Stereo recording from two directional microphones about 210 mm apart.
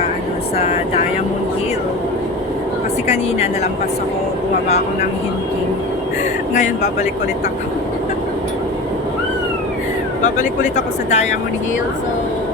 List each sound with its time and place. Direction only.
0.5 s speech: 30° left (ahead or behind)
3.1 s speech: 30° left (ahead or behind)
6.5 s speech: 35° left (ahead or behind)
10.2 s speech: 35° left (ahead or behind)